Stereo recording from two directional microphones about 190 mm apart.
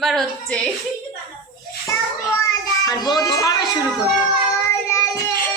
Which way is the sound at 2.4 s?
20° left (ahead or behind).